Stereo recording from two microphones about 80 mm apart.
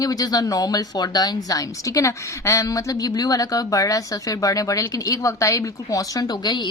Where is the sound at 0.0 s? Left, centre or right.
Left.